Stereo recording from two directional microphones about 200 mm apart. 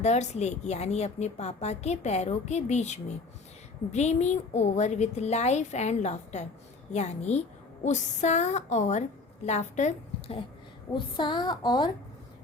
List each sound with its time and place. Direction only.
0.0 s a woman's voice: 35° left (ahead or behind)